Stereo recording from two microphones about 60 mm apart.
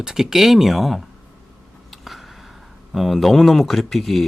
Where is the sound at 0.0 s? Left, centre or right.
Centre.